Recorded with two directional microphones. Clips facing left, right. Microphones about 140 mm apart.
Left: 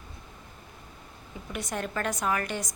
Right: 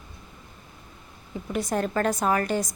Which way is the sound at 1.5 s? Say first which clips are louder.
Right 7 dB; 35° right (ahead or behind).